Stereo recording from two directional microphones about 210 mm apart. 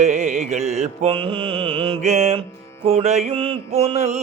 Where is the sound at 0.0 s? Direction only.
35° right (ahead or behind).